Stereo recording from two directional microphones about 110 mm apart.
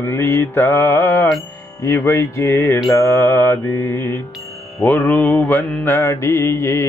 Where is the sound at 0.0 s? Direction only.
20° left (ahead or behind).